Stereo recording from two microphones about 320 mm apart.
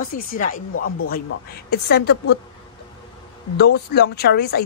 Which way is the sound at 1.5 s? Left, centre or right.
Left.